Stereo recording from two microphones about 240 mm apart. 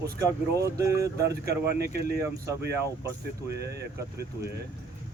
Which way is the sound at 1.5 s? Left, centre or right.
Right.